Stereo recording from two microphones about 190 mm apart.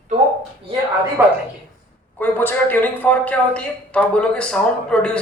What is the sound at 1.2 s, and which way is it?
Speech, 15° right (ahead or behind).